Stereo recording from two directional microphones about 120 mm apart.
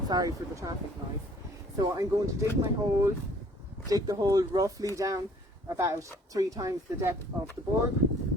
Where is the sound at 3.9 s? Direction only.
30° right (ahead or behind).